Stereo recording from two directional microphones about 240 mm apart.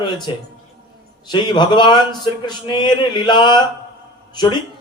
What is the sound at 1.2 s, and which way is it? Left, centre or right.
A man's voice, centre.